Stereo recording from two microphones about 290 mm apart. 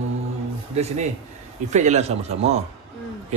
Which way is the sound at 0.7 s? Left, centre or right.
Right.